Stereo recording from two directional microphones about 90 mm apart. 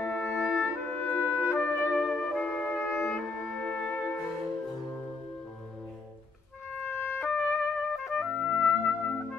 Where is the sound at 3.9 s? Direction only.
25° left (ahead or behind).